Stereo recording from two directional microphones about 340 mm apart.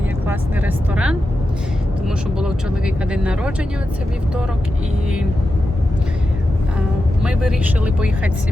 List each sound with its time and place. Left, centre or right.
0.3 s vehicle: centre
2.0 s speech: centre
6.7 s speech: centre